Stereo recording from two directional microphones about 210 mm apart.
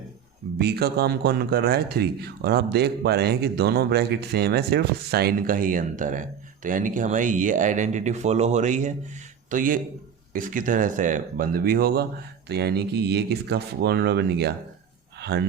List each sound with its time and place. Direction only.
0.6 s speech: 50° right (ahead or behind)